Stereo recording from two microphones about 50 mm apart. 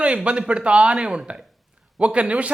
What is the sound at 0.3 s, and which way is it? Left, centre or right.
A man's voice, right.